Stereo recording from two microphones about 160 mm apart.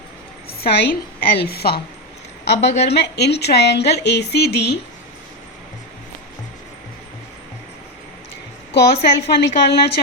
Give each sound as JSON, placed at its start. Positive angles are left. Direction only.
{"t": 0.6, "sound": "a woman's voice", "side_deg": 80}
{"t": 2.5, "sound": "a woman's voice", "side_deg": 90}
{"t": 8.7, "sound": "a woman's voice", "side_deg": 90}